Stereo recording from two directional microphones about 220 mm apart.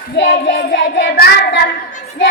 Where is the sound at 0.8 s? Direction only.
50° left (ahead or behind).